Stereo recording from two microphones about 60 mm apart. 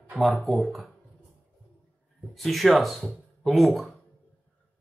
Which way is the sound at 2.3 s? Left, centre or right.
Centre.